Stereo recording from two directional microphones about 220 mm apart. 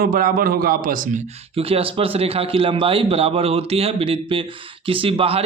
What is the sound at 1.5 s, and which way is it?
A man's voice, 25° right (ahead or behind).